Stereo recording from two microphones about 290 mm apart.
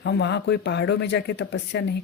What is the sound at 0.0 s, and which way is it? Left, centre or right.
Speech, left.